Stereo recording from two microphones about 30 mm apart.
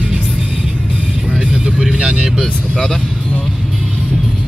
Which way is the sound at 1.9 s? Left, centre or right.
Right.